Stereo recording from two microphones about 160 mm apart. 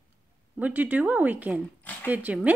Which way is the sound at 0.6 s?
10° right (ahead or behind).